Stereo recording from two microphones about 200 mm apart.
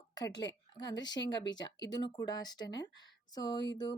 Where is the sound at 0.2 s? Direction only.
20° left (ahead or behind).